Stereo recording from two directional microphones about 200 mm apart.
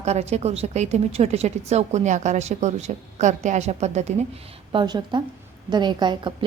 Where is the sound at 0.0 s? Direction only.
35° right (ahead or behind).